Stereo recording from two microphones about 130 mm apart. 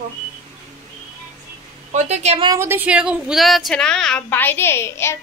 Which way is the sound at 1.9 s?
60° right (ahead or behind).